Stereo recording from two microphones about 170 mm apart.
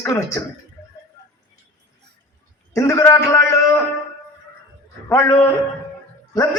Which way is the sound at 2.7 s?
20° left (ahead or behind).